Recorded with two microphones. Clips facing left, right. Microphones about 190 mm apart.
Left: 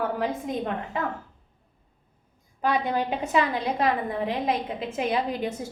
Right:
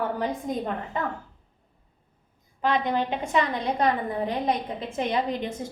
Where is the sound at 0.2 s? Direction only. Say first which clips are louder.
Even; centre (ahead or behind).